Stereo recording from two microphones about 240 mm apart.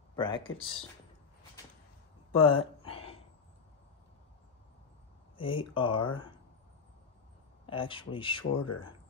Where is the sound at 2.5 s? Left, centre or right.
Left.